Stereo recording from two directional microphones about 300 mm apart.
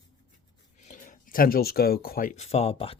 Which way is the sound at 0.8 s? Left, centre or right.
Left.